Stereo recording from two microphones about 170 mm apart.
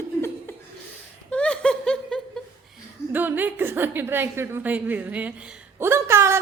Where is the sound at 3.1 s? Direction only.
10° right (ahead or behind).